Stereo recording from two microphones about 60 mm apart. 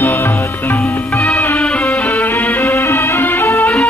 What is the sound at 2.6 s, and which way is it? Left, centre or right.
Music, left.